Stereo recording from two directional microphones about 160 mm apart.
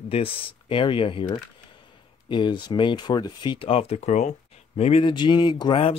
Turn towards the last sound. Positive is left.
turn(degrees=30)  # may be behind; listen again after turning